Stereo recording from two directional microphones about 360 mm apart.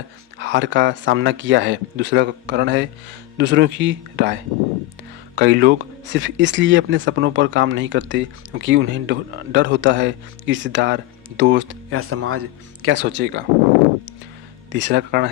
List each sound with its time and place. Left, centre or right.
0.3 s speech: right
14.7 s speech: right